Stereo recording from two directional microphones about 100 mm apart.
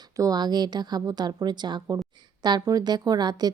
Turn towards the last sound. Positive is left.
turn(degrees=-45)  # may be behind; listen again after turning